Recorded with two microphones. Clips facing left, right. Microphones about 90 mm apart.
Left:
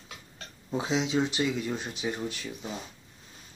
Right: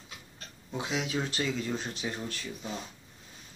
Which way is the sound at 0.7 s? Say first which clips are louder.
Left 5 dB; 25° left (ahead or behind).